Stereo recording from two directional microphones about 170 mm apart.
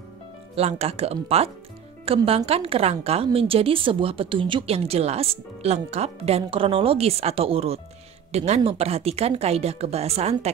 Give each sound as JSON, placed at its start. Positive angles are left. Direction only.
{"t": 0.6, "sound": "a woman's voice", "side_deg": -40}